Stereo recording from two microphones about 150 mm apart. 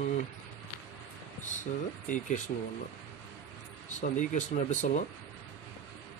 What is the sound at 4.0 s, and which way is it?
Speech, 55° left (ahead or behind).